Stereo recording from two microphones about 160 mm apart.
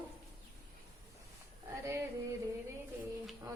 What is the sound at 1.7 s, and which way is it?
Female singing, 20° right (ahead or behind).